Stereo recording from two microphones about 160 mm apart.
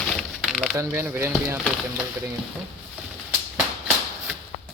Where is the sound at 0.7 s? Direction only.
20° right (ahead or behind).